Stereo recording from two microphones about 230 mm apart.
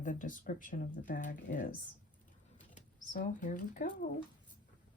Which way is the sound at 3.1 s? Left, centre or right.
Left.